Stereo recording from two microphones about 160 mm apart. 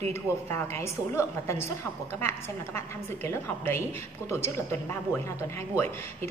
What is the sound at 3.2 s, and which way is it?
Speech, 15° left (ahead or behind).